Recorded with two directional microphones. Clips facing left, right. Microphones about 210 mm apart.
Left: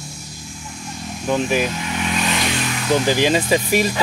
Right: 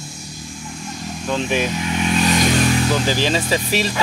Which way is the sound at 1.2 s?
10° left (ahead or behind).